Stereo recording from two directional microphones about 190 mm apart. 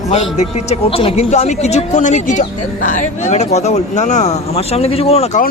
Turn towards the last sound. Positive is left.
turn(degrees=35)  # may be behind; listen again after turning